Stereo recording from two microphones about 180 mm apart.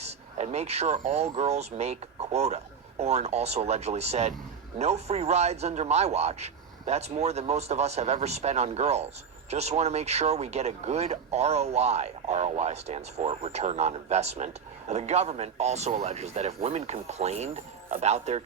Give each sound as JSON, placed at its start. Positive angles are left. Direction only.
{"t": 0.0, "sound": "speech", "side_deg": -35}